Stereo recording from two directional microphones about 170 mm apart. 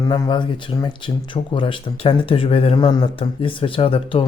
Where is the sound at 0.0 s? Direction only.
25° left (ahead or behind).